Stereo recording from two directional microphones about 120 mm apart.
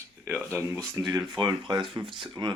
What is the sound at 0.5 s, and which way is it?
Speech, 20° right (ahead or behind).